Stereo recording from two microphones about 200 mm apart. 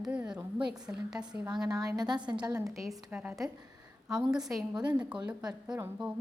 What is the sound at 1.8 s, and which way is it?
Speech, 20° right (ahead or behind).